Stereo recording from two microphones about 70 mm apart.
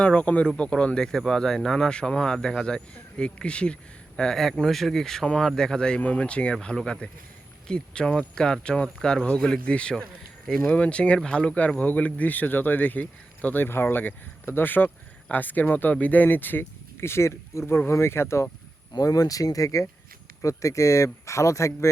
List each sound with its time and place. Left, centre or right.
0.0 s speech: centre; by 18.5 s left
18.9 s speech: left